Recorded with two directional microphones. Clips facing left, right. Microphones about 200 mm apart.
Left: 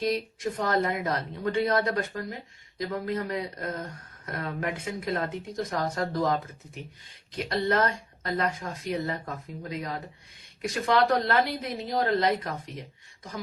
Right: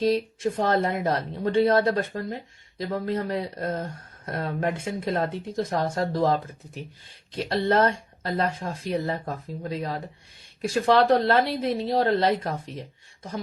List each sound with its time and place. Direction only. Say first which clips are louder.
0.0 s a woman's voice: right 5 dB; 30° right (ahead or behind)